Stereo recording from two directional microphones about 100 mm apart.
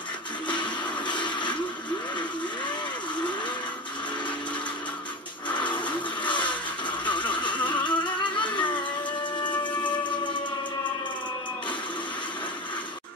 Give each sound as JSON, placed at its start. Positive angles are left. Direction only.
{"t": 0.5, "sound": "music", "side_deg": 50}
{"t": 5.5, "sound": "blender", "side_deg": 50}
{"t": 7.1, "sound": "a sound", "side_deg": 55}
{"t": 9.4, "sound": "music", "side_deg": 50}